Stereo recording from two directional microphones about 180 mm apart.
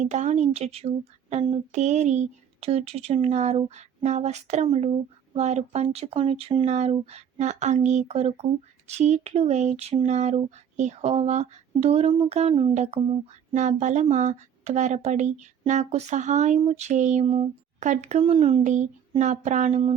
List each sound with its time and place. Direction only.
0.0 s speech: 40° right (ahead or behind)